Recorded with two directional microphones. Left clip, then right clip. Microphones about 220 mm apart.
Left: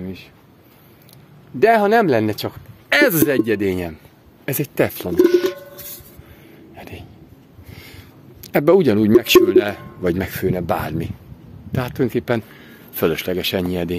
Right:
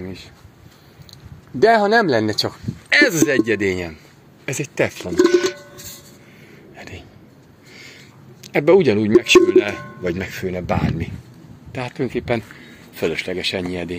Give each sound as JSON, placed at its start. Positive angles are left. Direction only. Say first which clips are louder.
{"t": 1.6, "sound": "speech", "louder": "even", "side_deg": 0}
{"t": 2.9, "sound": "speech", "louder": "even", "side_deg": 35}
{"t": 6.7, "sound": "a sound", "louder": "even", "side_deg": 15}
{"t": 7.7, "sound": "a man's voice", "louder": "right 1 dB", "side_deg": 25}